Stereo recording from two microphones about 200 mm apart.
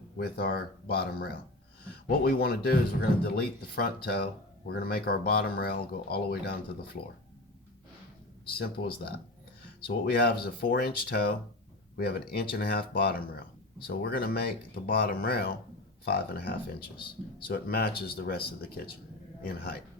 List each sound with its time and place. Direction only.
0.2 s speech: 50° left (ahead or behind)
8.5 s speech: 50° left (ahead or behind)